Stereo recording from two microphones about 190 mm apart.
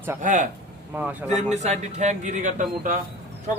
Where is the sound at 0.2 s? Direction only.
40° right (ahead or behind).